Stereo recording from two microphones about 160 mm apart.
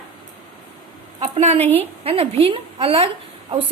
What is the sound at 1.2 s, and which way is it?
A woman's voice, 40° right (ahead or behind).